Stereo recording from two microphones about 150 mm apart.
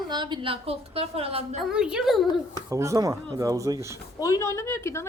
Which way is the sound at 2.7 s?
20° right (ahead or behind).